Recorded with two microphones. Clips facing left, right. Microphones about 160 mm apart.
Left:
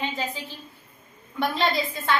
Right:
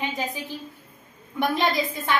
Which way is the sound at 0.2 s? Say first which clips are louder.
Right 2 dB; 15° right (ahead or behind).